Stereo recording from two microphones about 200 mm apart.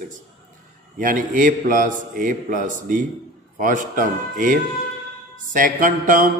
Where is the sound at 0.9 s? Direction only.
40° right (ahead or behind).